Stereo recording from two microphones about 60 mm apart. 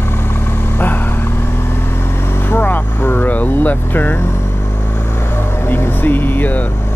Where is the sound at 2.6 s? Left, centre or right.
Left.